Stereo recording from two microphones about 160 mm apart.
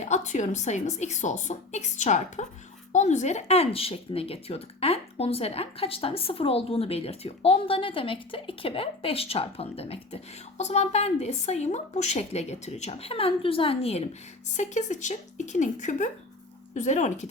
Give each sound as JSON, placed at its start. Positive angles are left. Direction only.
{"t": 0.0, "sound": "a woman's voice", "side_deg": 45}